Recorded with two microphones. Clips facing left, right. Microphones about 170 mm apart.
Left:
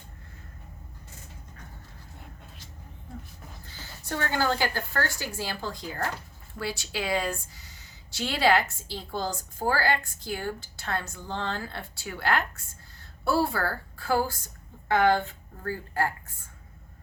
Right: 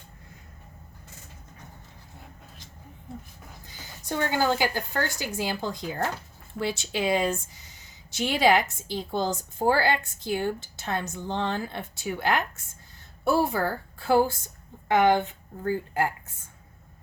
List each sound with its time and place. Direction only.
3.7 s a woman's voice: 15° right (ahead or behind)